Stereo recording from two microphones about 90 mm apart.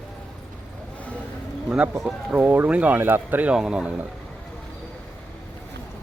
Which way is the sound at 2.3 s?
20° right (ahead or behind).